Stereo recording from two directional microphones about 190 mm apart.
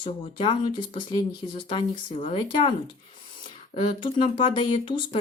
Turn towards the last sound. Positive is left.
turn(degrees=25)  # may be behind; listen again after turning